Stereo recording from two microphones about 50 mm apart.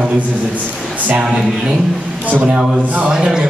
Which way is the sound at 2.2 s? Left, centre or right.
Right.